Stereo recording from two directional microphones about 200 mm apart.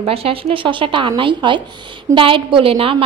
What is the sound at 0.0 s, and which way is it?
A woman's voice, 30° right (ahead or behind).